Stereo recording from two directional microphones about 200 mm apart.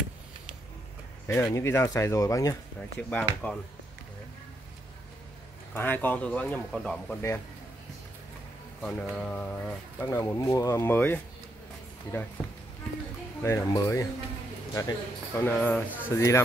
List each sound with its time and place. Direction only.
1.2 s speech: 15° left (ahead or behind)
3.0 s speech: 5° left (ahead or behind)
5.8 s speech: 10° left (ahead or behind)
8.8 s speech: 5° left (ahead or behind)
13.4 s speech: 15° left (ahead or behind)